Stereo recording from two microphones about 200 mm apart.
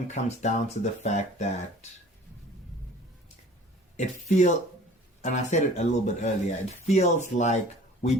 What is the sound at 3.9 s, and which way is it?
Speech, 35° left (ahead or behind).